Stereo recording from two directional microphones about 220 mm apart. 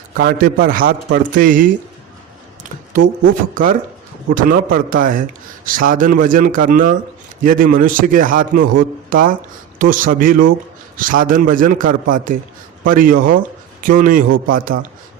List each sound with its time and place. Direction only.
0.2 s speech: 40° right (ahead or behind)
3.5 s speech: 40° right (ahead or behind)